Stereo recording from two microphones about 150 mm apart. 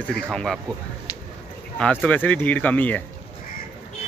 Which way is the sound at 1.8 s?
10° left (ahead or behind).